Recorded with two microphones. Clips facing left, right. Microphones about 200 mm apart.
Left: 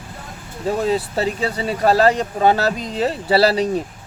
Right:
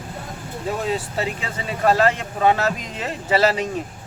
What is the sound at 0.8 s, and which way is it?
Speech, 35° left (ahead or behind).